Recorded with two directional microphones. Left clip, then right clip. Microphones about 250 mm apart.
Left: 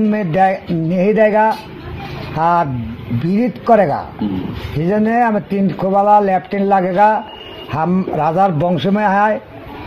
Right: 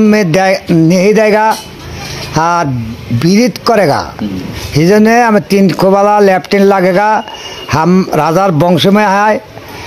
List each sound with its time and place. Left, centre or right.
0.1 s speech: right